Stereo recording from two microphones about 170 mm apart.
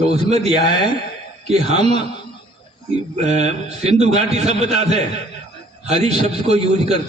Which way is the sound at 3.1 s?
40° right (ahead or behind).